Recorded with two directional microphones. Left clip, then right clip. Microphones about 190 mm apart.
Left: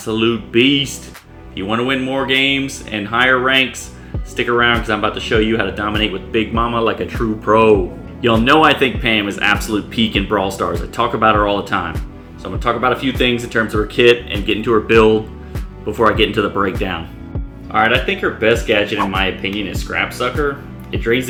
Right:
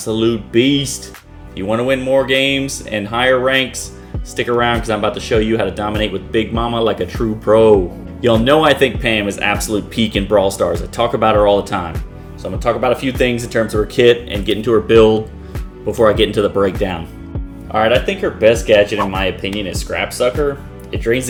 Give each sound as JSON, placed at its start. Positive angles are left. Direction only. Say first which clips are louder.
{"t": 0.0, "sound": "speech", "louder": "right 1 dB", "side_deg": -35}